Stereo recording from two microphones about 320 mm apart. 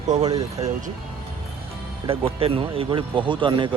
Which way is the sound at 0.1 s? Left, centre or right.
Centre.